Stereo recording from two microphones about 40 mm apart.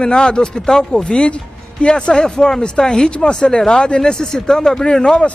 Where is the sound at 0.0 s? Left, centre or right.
Centre.